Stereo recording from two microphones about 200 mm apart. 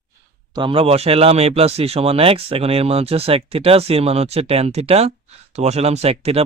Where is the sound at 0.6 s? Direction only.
25° right (ahead or behind).